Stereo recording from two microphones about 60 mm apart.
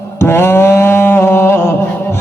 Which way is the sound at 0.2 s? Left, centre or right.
Left.